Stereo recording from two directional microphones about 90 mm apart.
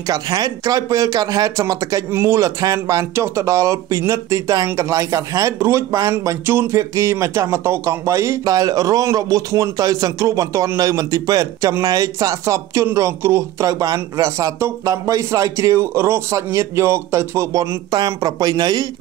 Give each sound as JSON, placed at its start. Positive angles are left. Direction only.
{"t": 0.1, "sound": "speech", "side_deg": -45}
{"t": 6.2, "sound": "speech", "side_deg": -25}
{"t": 17.9, "sound": "speech", "side_deg": -50}